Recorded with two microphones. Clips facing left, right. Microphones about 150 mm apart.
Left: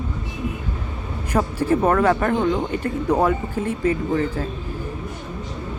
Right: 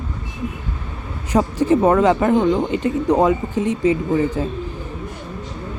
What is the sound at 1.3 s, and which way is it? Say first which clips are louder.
Speech: right 4 dB; 15° right (ahead or behind).